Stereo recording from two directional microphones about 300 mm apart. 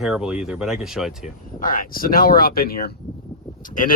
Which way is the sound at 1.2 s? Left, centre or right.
Left.